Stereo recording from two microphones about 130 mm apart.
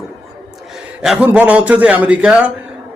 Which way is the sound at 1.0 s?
10° right (ahead or behind).